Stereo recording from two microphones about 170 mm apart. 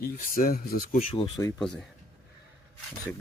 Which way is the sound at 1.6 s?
Centre (ahead or behind).